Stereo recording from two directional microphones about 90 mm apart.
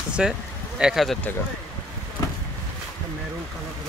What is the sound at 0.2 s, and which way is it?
Speech, 10° right (ahead or behind).